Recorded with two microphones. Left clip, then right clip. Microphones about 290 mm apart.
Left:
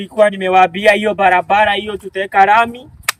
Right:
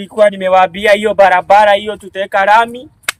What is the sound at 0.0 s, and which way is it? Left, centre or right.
Speech, centre.